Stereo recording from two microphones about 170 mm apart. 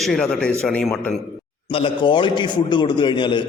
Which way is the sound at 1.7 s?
30° left (ahead or behind).